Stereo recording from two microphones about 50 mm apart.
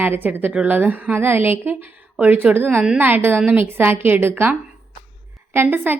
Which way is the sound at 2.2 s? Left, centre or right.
Right.